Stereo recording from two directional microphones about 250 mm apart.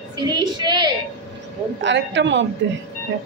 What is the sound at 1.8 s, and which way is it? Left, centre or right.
Speech, right.